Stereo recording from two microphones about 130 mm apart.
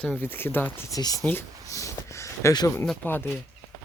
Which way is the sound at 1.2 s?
20° left (ahead or behind).